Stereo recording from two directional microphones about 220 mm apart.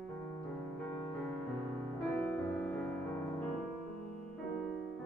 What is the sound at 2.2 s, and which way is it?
Music, 10° left (ahead or behind).